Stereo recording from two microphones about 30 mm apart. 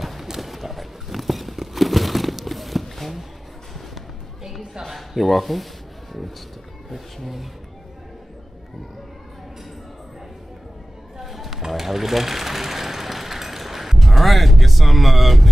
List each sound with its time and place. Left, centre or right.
0.0 s a sound: centre
4.8 s speech: centre
11.1 s sewing machine: centre